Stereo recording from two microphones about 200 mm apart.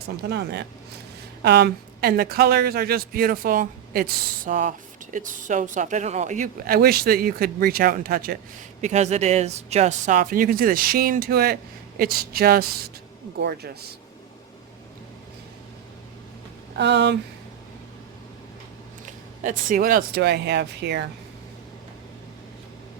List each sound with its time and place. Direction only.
0.2 s speech: 55° right (ahead or behind)
8.8 s speech: 35° right (ahead or behind); by 13.9 s 50° right (ahead or behind)
16.7 s speech: 60° right (ahead or behind)
19.0 s speech: 40° right (ahead or behind); by 21.0 s 55° right (ahead or behind)